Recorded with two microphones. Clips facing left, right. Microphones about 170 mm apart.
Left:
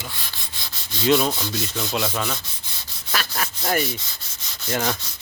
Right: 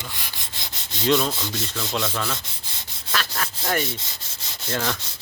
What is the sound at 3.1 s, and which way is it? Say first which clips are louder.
Rub: left 1 dB; 10° left (ahead or behind).